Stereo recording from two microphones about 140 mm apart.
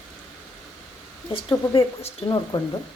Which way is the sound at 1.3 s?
40° left (ahead or behind).